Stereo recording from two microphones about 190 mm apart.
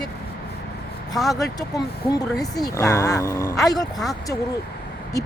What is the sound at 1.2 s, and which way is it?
Speech, centre (ahead or behind).